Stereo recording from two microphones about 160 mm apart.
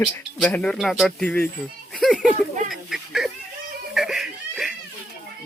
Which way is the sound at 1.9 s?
Centre (ahead or behind).